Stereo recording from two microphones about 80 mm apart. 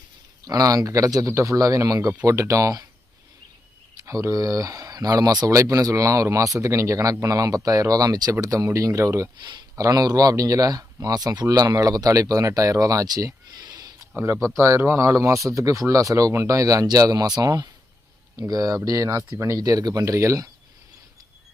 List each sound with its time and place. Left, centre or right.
0.4 s speech: right
4.0 s speech: right
14.4 s speech: right